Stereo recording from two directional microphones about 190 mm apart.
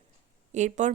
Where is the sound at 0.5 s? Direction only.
40° right (ahead or behind).